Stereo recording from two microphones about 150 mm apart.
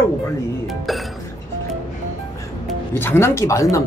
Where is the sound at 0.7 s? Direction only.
Centre (ahead or behind).